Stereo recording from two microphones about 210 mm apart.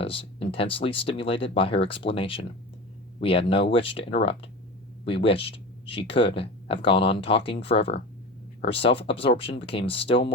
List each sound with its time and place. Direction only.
0.0 s speech: 25° left (ahead or behind)